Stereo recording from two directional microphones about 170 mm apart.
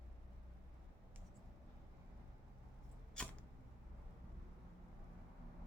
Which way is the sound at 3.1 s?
5° left (ahead or behind).